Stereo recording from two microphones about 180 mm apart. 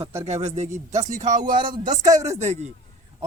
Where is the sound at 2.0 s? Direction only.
20° right (ahead or behind).